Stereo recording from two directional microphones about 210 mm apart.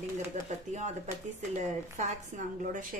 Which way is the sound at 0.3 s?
35° right (ahead or behind).